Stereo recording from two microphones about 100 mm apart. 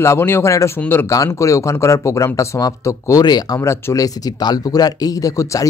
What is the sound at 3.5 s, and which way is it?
Speech, 25° left (ahead or behind).